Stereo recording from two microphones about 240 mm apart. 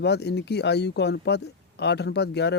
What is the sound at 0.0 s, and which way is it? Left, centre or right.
Speech, left.